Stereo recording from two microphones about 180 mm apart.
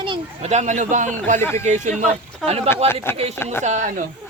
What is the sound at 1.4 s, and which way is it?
Speech, 15° left (ahead or behind).